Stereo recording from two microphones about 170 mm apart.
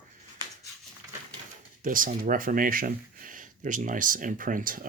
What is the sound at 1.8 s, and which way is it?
Speech, 55° right (ahead or behind).